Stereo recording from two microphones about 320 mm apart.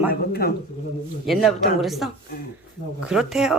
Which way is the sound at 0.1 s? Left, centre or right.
Left.